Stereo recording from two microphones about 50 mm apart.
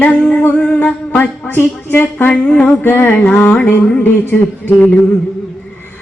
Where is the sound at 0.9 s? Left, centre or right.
Left.